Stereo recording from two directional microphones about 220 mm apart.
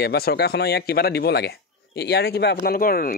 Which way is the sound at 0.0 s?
45° left (ahead or behind).